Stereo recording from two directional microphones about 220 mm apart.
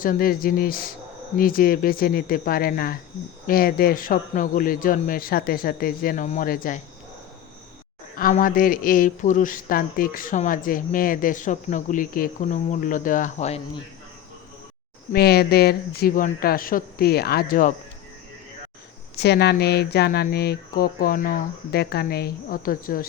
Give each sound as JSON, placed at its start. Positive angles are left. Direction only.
{"t": 0.0, "sound": "speech", "side_deg": 40}
{"t": 8.1, "sound": "speech", "side_deg": 40}
{"t": 15.1, "sound": "speech", "side_deg": 45}
{"t": 19.1, "sound": "speech", "side_deg": 50}